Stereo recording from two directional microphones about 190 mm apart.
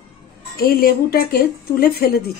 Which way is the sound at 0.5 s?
55° left (ahead or behind).